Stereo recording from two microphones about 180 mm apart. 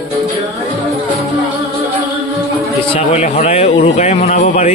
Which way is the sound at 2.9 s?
35° left (ahead or behind).